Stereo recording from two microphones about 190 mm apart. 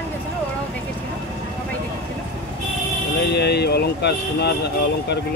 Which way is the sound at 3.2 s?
60° left (ahead or behind).